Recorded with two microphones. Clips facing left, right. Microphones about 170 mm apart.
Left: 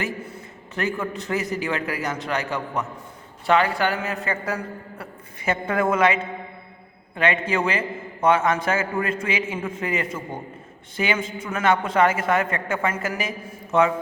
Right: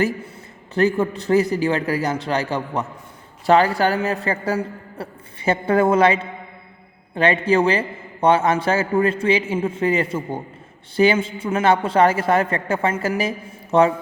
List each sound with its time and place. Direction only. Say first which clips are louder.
0.7 s a man's voice: right 8 dB; 35° right (ahead or behind)
7.2 s a man's voice: right 5 dB; 35° right (ahead or behind)